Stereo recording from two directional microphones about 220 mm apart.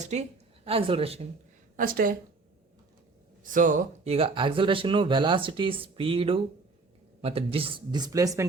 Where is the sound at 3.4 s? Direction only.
35° right (ahead or behind).